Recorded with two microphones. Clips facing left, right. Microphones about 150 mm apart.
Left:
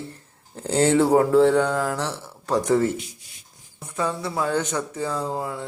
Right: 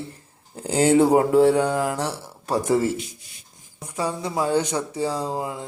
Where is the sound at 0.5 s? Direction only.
10° right (ahead or behind).